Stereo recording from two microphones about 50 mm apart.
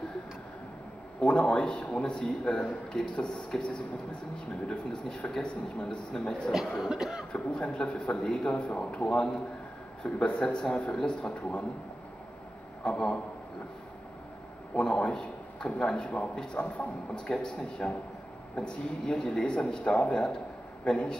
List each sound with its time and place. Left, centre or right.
1.2 s a man's voice: centre
6.5 s speech: centre
6.9 s cough: centre
7.3 s a man's voice: centre
12.8 s a man's voice: centre
14.8 s a man's voice: centre
17.3 s a man's voice: centre